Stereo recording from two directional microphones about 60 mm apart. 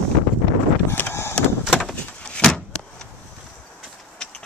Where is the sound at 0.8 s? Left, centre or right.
Left.